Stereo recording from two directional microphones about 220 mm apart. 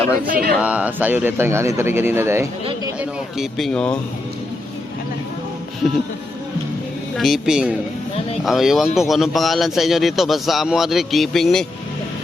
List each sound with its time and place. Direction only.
0.3 s speech: 40° right (ahead or behind)
0.6 s speech: 5° right (ahead or behind)
7.2 s speech: centre (ahead or behind)